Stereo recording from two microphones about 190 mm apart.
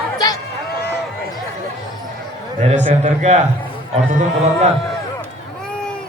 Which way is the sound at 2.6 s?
35° right (ahead or behind).